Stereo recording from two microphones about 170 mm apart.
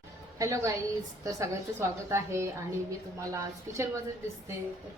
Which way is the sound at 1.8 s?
15° right (ahead or behind).